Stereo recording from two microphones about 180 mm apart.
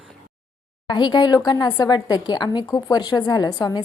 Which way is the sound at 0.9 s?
25° left (ahead or behind).